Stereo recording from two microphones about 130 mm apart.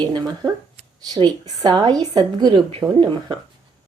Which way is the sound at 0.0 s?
35° right (ahead or behind).